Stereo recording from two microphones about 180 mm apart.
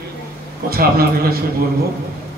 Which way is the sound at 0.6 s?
60° right (ahead or behind).